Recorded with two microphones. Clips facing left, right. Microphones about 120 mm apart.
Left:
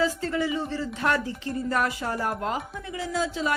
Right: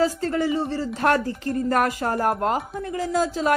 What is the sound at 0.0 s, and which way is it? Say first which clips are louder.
Speech: right 4 dB; 40° right (ahead or behind).